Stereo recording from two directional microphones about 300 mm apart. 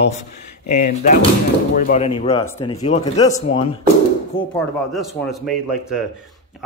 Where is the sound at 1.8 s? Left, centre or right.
Left.